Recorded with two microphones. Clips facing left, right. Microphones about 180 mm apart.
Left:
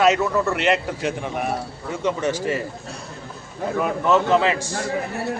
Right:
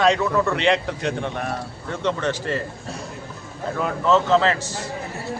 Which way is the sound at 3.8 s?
10° left (ahead or behind).